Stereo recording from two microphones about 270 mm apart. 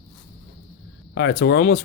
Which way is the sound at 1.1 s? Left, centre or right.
Left.